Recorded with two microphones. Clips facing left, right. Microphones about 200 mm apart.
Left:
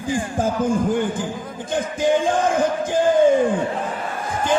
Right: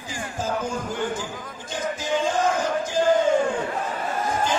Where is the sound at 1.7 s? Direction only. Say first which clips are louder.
Left 7 dB; 55° left (ahead or behind).